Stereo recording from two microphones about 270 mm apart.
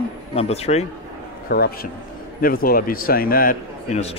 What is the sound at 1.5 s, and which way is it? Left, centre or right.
A man's voice, left.